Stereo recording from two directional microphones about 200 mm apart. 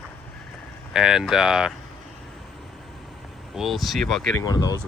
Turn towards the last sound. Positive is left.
turn(degrees=20)  # may be behind; listen again after turning